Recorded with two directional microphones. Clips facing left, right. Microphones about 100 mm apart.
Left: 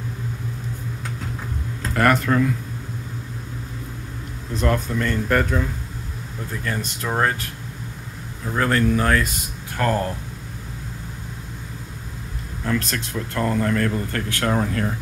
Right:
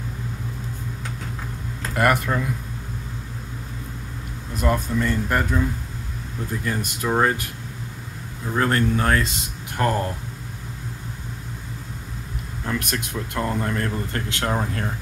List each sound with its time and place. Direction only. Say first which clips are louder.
2.0 s speech: left 3 dB; 15° right (ahead or behind)
4.6 s speech: even; 10° right (ahead or behind)
8.5 s speech: left 1 dB; 25° right (ahead or behind)
12.6 s speech: left 3 dB; 20° right (ahead or behind)